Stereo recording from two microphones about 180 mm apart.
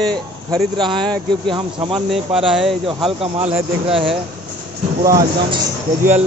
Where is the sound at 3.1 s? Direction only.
30° right (ahead or behind).